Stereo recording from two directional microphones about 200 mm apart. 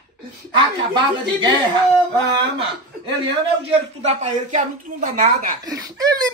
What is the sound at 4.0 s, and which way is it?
Speech, 35° right (ahead or behind).